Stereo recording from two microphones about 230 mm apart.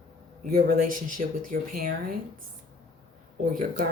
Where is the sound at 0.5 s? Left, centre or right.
Right.